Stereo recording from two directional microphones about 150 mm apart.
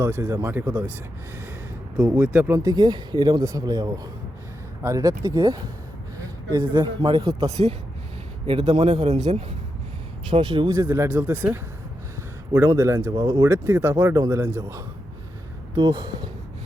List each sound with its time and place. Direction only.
0.0 s speech: 15° right (ahead or behind)
2.0 s speech: 20° right (ahead or behind)
2.2 s speech: 10° right (ahead or behind)
2.5 s a man's voice: 25° right (ahead or behind)
8.4 s a man's voice: 35° right (ahead or behind)
10.2 s a man's voice: 30° right (ahead or behind)
10.8 s speech: 15° right (ahead or behind)
13.5 s speech: 15° right (ahead or behind)